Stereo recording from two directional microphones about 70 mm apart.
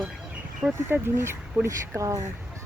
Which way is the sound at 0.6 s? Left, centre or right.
Centre.